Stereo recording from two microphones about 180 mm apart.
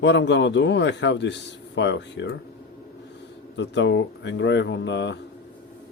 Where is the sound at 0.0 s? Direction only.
75° left (ahead or behind).